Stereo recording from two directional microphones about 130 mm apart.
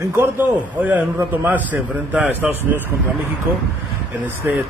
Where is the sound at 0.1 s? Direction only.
15° right (ahead or behind).